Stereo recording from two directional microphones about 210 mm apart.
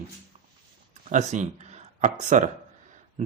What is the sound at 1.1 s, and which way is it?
Speech, 35° right (ahead or behind).